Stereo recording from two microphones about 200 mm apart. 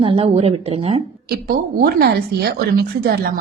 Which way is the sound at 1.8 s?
50° right (ahead or behind).